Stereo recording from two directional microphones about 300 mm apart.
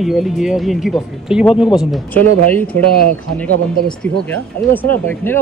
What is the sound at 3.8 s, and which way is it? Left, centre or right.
Speech, centre.